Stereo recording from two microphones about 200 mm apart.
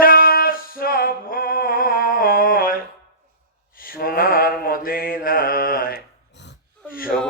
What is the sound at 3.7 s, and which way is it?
Mantra, 45° left (ahead or behind).